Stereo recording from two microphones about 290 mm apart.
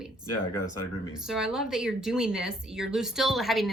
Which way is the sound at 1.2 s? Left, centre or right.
Centre.